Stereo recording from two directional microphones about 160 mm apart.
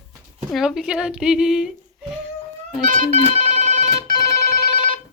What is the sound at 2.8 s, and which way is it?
Speech, 50° right (ahead or behind).